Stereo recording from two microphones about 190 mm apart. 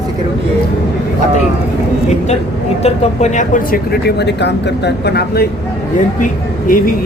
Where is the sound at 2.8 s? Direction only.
40° left (ahead or behind); by 5.4 s 60° left (ahead or behind).